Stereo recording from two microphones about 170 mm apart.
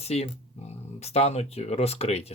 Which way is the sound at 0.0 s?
35° left (ahead or behind).